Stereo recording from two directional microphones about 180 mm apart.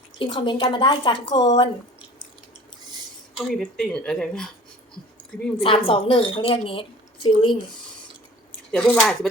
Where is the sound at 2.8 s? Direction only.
25° right (ahead or behind).